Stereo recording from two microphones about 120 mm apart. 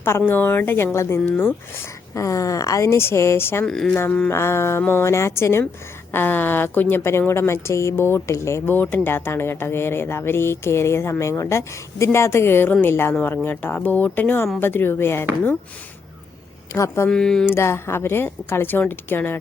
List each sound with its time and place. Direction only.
0.0 s speech: 20° left (ahead or behind)
3.7 s speech: 5° left (ahead or behind)
4.3 s speech: 20° left (ahead or behind)
16.7 s speech: 25° left (ahead or behind)
17.1 s speech: 5° left (ahead or behind)
17.4 s speech: 20° left (ahead or behind)